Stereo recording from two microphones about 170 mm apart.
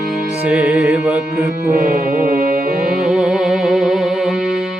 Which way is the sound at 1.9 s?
60° right (ahead or behind).